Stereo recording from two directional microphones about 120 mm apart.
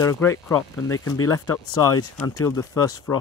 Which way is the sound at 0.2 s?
25° left (ahead or behind).